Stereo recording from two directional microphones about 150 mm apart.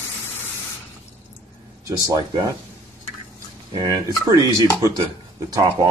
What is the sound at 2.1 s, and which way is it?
Speech, 25° right (ahead or behind).